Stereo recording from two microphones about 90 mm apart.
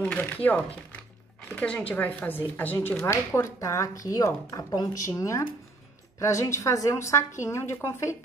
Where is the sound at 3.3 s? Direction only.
35° left (ahead or behind).